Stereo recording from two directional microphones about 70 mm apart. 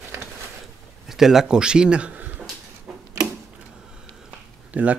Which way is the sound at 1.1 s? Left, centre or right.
Centre.